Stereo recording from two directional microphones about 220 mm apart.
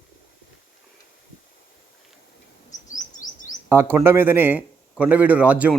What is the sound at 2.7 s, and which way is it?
Chirp, 35° left (ahead or behind).